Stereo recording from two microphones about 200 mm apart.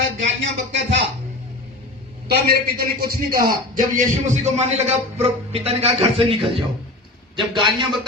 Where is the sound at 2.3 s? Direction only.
50° right (ahead or behind).